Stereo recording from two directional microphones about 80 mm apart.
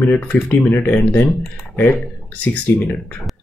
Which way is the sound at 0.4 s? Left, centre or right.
Left.